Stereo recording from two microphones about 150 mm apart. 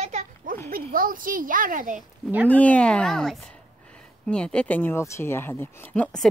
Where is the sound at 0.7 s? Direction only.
70° right (ahead or behind).